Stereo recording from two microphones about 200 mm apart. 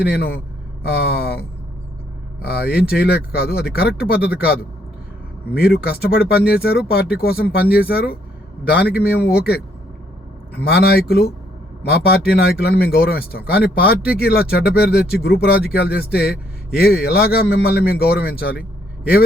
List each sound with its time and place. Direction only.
0.0 s speech: 50° left (ahead or behind)
2.5 s speech: 50° left (ahead or behind)
5.5 s speech: 50° left (ahead or behind)
10.6 s speech: 50° left (ahead or behind)